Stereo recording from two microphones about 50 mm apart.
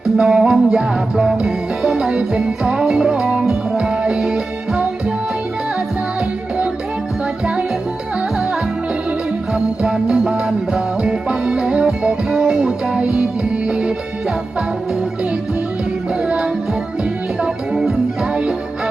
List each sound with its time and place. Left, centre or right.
0.2 s music: centre
9.8 s music: centre
16.2 s music: centre